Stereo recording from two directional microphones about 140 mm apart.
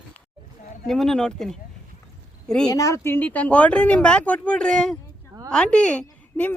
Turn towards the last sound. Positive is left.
turn(degrees=10)  # may be behind; listen again after turning